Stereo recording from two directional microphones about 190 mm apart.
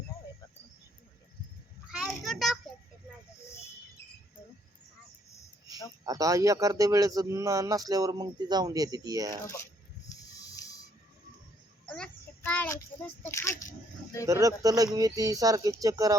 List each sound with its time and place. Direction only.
1.9 s child singing: centre (ahead or behind)
6.1 s speech: 20° right (ahead or behind)
10.1 s a sound: 20° left (ahead or behind)
11.9 s child singing: 5° left (ahead or behind)
13.2 s speech: 15° left (ahead or behind)
14.3 s speech: 20° right (ahead or behind)